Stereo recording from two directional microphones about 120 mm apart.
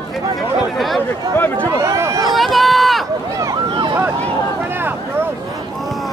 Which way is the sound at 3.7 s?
40° right (ahead or behind).